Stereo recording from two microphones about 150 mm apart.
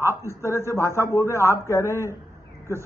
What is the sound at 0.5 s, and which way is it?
A man's voice, 20° left (ahead or behind).